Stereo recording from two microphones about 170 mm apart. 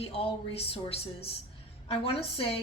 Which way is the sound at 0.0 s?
35° left (ahead or behind).